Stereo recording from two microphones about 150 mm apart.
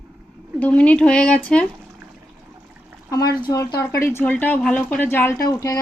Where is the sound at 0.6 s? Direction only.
10° left (ahead or behind).